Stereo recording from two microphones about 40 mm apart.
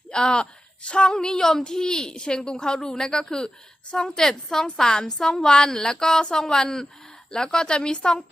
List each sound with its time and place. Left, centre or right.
0.1 s a woman's voice: left